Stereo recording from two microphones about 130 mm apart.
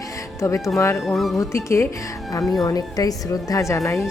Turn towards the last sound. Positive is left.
turn(degrees=25)  # may be behind; listen again after turning